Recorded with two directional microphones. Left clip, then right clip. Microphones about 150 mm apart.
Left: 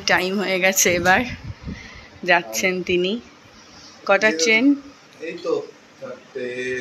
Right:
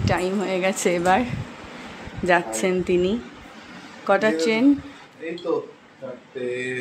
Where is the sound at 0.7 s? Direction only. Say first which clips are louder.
Left 1 dB; 15° right (ahead or behind).